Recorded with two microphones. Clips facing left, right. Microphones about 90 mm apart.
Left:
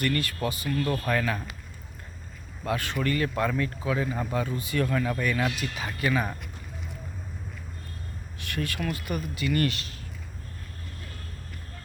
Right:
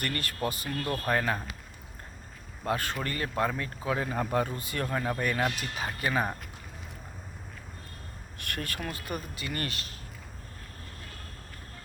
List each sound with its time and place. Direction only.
0.0 s speech: 45° right (ahead or behind)
1.0 s speech: 30° right (ahead or behind)
2.6 s speech: 40° right (ahead or behind)
4.9 s speech: 30° right (ahead or behind)
8.4 s speech: 50° right (ahead or behind)